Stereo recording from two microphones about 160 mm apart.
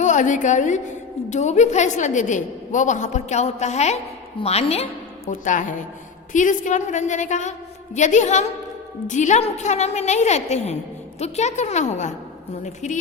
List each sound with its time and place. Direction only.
0.0 s a woman's voice: 50° left (ahead or behind)
5.3 s a woman's voice: 55° left (ahead or behind)